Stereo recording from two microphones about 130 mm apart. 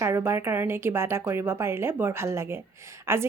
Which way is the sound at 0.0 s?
20° right (ahead or behind).